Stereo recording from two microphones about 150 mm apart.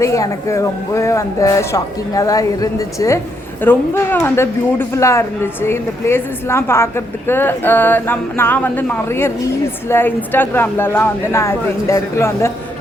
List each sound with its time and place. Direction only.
0.0 s a woman's voice: 20° left (ahead or behind)